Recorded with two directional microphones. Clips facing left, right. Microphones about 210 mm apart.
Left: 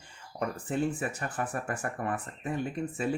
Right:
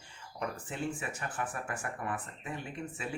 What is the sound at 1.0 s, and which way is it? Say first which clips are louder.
Speech: left 5 dB; 40° left (ahead or behind).